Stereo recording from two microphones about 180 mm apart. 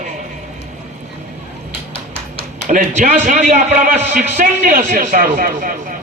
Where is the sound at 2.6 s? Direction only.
45° right (ahead or behind).